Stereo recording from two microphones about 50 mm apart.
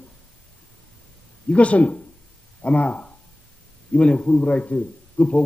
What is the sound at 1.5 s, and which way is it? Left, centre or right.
A man's voice, left.